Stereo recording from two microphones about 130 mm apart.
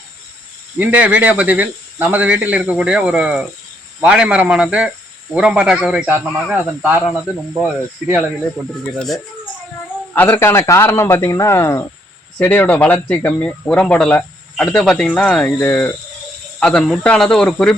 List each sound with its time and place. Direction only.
0.8 s speech: 10° right (ahead or behind)
9.0 s speech: centre (ahead or behind)
10.2 s speech: 20° left (ahead or behind)